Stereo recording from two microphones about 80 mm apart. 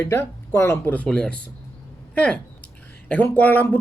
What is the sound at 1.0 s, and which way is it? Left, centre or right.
Speech, centre.